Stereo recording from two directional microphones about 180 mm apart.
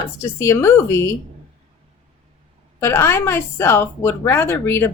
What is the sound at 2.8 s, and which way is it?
A woman's voice, 15° left (ahead or behind).